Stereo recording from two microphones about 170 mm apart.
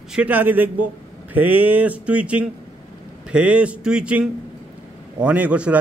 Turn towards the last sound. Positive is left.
turn(degrees=-10)  # may be behind; listen again after turning